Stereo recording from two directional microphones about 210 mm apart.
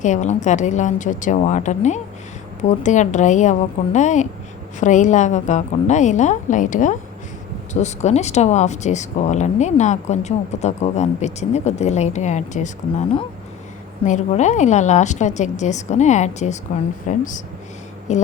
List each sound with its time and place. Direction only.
0.0 s speech: 35° left (ahead or behind)